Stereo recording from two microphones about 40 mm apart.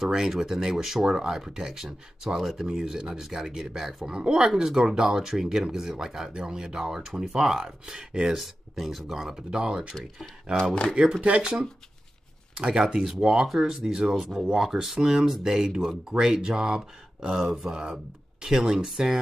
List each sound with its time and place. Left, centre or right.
0.0 s speech: centre
8.4 s speech: centre
10.6 s speech: left
11.1 s speech: right
12.5 s speech: centre
17.5 s speech: centre
17.7 s speech: centre